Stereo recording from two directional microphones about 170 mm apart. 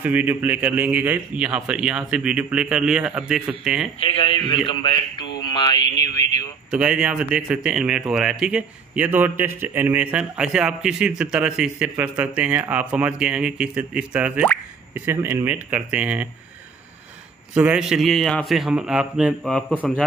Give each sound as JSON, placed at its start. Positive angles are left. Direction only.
{"t": 0.0, "sound": "a man's voice", "side_deg": -10}
{"t": 4.0, "sound": "a man's voice", "side_deg": 30}
{"t": 6.7, "sound": "a man's voice", "side_deg": -5}
{"t": 17.6, "sound": "a man's voice", "side_deg": -5}